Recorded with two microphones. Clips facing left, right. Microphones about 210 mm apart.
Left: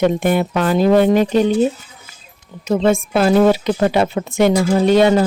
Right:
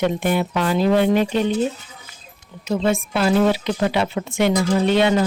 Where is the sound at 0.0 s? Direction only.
50° left (ahead or behind).